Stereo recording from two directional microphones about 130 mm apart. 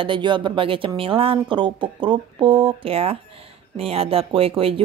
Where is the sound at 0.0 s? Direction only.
40° right (ahead or behind).